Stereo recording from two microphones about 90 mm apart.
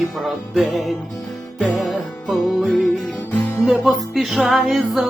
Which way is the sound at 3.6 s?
Centre (ahead or behind).